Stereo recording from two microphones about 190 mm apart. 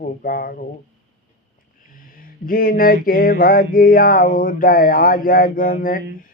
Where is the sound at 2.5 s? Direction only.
50° left (ahead or behind).